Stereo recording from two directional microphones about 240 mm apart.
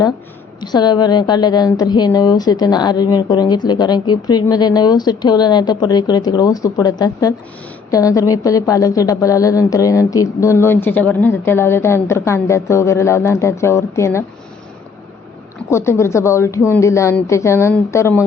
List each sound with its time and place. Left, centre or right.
0.6 s a woman's voice: centre
15.7 s a woman's voice: centre